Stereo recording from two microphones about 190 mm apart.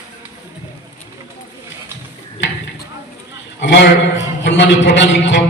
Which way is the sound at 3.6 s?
70° left (ahead or behind).